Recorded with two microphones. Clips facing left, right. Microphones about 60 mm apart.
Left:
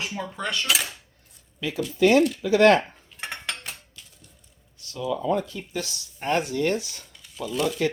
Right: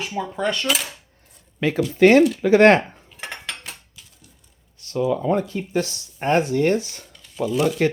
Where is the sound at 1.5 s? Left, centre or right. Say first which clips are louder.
Right 6 dB; right.